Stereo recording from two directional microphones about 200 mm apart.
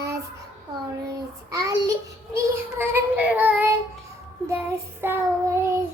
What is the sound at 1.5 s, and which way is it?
Child singing, 15° right (ahead or behind).